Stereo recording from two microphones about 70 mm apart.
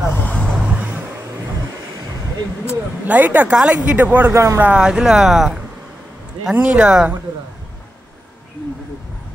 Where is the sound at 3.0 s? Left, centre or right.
Right.